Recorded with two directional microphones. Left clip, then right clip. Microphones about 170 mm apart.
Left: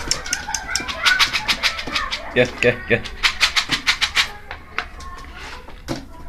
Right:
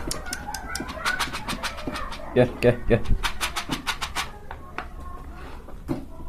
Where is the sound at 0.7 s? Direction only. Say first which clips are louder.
Left 10 dB; 60° right (ahead or behind).